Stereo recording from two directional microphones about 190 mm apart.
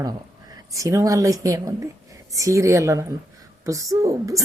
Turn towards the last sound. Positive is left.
turn(degrees=-15)  # may be behind; listen again after turning